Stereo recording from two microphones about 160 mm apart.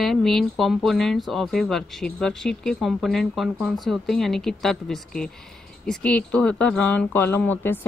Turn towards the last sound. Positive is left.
turn(degrees=10)  # may be behind; listen again after turning